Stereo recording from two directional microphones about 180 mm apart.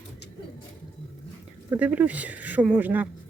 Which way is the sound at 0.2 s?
70° left (ahead or behind).